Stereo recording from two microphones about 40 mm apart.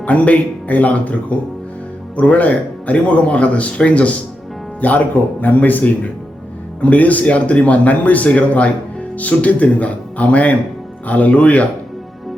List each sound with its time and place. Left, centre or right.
0.0 s speech: left
4.8 s speech: left
6.9 s speech: left